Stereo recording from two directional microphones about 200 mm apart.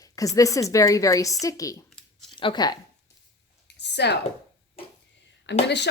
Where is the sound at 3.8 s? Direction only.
60° left (ahead or behind).